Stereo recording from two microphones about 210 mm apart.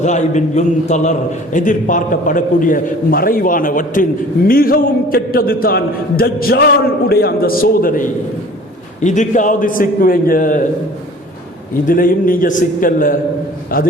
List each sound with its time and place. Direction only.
0.0 s a man's voice: 35° left (ahead or behind)
11.9 s a man's voice: 40° left (ahead or behind)